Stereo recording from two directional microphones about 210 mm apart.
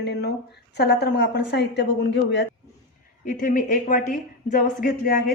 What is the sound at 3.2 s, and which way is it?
A woman's voice, 40° left (ahead or behind).